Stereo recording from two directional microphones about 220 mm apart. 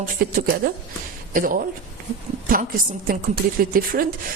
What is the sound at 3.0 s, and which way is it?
Speech, 40° right (ahead or behind).